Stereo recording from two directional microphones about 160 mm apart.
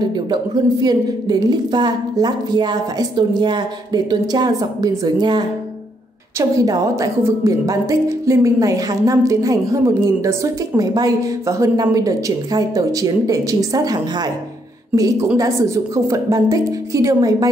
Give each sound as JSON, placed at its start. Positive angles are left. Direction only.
{"t": 0.0, "sound": "speech", "side_deg": -25}
{"t": 6.5, "sound": "speech", "side_deg": -20}